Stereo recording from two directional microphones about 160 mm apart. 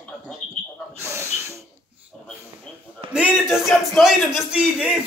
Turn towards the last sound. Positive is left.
turn(degrees=-5)  # may be behind; listen again after turning